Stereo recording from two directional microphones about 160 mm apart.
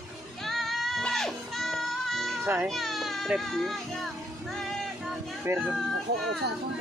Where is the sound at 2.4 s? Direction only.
15° right (ahead or behind).